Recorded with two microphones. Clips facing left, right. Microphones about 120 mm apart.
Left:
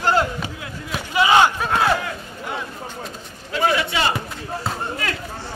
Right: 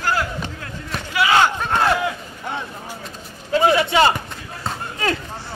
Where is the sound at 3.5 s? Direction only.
30° right (ahead or behind).